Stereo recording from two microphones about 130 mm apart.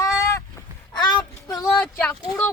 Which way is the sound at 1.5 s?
Centre (ahead or behind).